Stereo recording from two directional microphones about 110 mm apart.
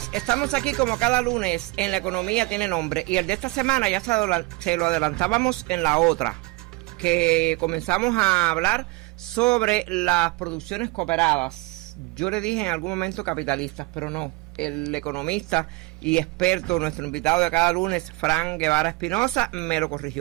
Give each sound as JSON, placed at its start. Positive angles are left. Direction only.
{"t": 0.0, "sound": "speech", "side_deg": 5}